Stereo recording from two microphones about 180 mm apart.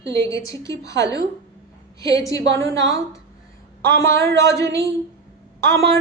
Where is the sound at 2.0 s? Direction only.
20° left (ahead or behind).